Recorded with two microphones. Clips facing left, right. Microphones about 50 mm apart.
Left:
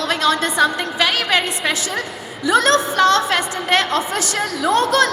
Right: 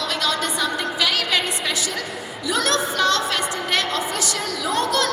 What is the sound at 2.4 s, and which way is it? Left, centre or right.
A woman's voice, left.